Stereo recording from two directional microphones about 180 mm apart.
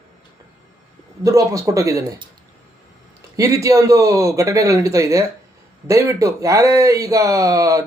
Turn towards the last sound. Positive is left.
turn(degrees=-20)  # may be behind; listen again after turning